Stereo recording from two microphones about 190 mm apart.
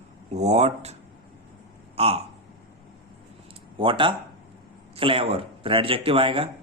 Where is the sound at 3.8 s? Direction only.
25° right (ahead or behind).